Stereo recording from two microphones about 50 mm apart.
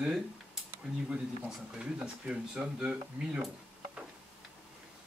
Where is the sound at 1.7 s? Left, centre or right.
Centre.